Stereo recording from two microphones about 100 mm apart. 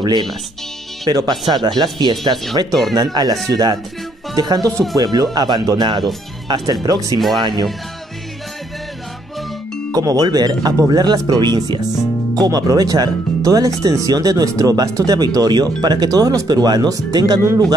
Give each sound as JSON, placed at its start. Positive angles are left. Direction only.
{"t": 0.0, "sound": "speech", "side_deg": -45}
{"t": 9.9, "sound": "speech", "side_deg": -35}